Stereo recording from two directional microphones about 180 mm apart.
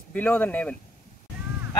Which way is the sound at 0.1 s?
10° left (ahead or behind).